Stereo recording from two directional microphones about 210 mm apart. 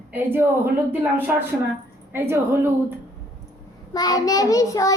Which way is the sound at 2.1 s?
10° right (ahead or behind).